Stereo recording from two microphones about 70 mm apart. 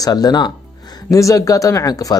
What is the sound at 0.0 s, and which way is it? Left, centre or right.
Speech, left.